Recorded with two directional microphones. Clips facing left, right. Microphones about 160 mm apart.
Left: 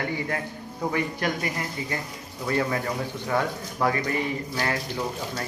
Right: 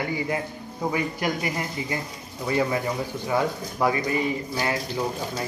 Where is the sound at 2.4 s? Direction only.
15° right (ahead or behind).